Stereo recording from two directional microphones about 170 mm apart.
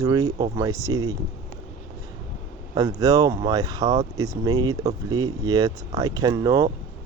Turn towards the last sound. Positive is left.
turn(degrees=-20)  # may be behind; listen again after turning